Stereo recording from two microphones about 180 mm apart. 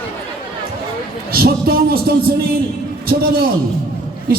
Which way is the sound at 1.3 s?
60° right (ahead or behind).